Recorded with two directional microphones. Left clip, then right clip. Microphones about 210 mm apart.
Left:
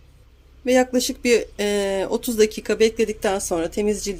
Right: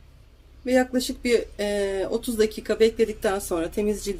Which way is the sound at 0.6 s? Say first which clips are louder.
Left 4 dB; 30° left (ahead or behind).